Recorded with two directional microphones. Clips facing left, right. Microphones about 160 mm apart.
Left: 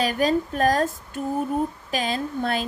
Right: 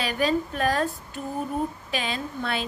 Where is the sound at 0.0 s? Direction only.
45° left (ahead or behind).